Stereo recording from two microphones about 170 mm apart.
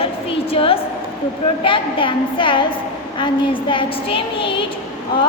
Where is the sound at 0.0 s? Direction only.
35° left (ahead or behind).